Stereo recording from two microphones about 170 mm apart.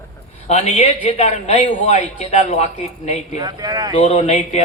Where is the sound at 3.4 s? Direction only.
25° right (ahead or behind).